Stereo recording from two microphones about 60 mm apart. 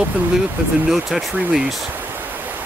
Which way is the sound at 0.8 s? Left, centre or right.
Centre.